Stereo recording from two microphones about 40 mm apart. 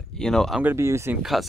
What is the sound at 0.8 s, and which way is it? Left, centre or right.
Speech, right.